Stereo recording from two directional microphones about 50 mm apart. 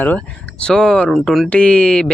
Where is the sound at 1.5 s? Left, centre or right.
Left.